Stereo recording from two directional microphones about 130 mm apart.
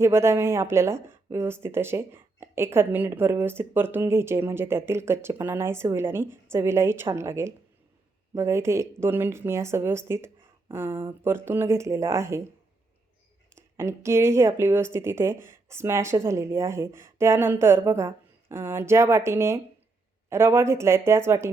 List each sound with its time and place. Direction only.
0.0 s speech: 20° right (ahead or behind)
13.6 s speech: 20° right (ahead or behind)